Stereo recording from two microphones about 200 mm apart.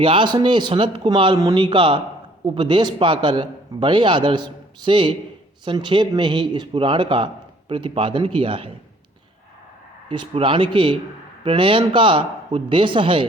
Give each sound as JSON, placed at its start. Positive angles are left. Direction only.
{"t": 0.0, "sound": "a man's voice", "side_deg": -25}
{"t": 10.1, "sound": "a man's voice", "side_deg": -25}